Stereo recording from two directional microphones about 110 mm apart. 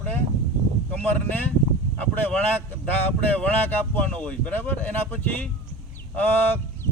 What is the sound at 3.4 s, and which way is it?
Speech, 15° left (ahead or behind).